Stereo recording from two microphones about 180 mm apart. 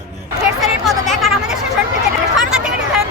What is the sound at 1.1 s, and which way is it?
Speech, centre (ahead or behind).